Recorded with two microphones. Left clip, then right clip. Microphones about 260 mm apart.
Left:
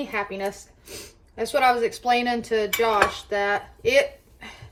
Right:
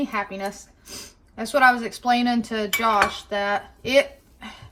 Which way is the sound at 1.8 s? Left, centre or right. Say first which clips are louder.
Even; centre.